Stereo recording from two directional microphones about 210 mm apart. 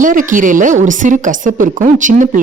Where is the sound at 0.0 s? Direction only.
40° right (ahead or behind).